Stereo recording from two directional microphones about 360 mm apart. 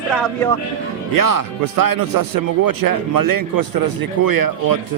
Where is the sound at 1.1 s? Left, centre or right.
Right.